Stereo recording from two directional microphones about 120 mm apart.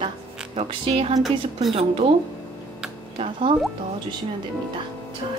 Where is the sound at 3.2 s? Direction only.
50° right (ahead or behind).